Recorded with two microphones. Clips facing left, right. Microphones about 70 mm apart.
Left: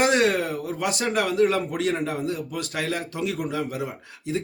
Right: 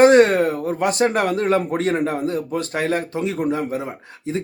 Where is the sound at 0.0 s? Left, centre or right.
Right.